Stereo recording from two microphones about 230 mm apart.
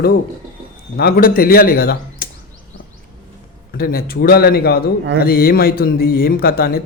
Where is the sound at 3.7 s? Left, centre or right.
Left.